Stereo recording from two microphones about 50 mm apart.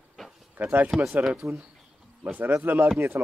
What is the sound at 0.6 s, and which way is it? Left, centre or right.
Speech, right.